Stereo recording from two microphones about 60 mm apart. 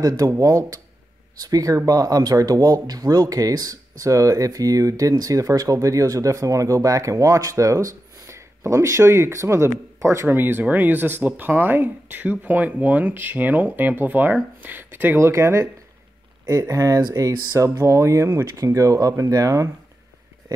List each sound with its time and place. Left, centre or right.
0.4 s speech: right
1.5 s speech: right
15.1 s speech: right
16.4 s speech: right
18.6 s speech: right